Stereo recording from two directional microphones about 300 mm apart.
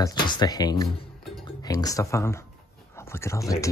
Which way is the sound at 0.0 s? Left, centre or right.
Centre.